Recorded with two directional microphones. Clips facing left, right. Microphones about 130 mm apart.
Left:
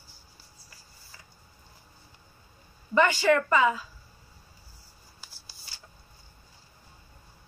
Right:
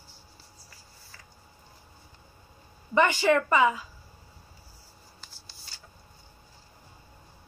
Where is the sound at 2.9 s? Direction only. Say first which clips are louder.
Even; 20° right (ahead or behind).